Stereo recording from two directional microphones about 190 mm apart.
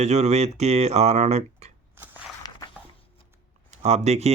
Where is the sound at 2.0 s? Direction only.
10° right (ahead or behind).